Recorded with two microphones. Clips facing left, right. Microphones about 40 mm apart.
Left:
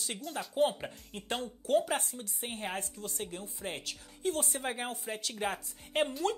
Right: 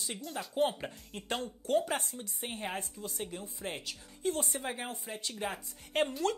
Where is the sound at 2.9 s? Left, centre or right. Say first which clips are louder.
Even; left.